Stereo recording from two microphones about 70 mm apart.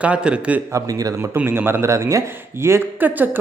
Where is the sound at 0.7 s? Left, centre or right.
Right.